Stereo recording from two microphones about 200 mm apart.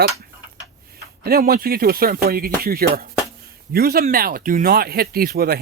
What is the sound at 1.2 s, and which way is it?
Speech, 50° right (ahead or behind).